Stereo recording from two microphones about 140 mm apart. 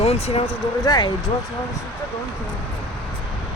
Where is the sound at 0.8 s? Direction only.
30° left (ahead or behind).